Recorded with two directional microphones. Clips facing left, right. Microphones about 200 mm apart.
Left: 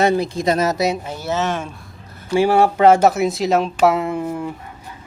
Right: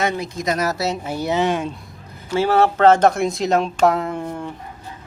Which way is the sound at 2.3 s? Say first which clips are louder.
Left 2 dB; 15° left (ahead or behind).